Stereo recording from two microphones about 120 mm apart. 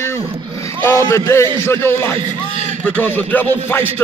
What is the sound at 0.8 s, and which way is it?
A man's voice, 20° left (ahead or behind).